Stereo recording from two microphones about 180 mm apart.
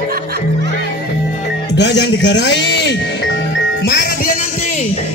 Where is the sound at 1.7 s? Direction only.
70° left (ahead or behind).